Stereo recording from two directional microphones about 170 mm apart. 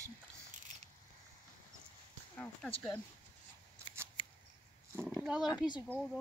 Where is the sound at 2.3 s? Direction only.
15° left (ahead or behind).